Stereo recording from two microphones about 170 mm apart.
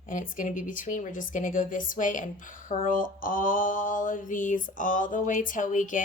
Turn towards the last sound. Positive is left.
turn(degrees=50)  # may be behind; listen again after turning